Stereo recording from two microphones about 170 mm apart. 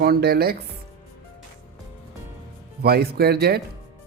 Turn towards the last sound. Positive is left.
turn(degrees=-65)  # may be behind; listen again after turning